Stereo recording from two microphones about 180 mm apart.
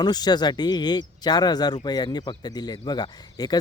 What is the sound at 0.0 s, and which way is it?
Speech, 25° left (ahead or behind).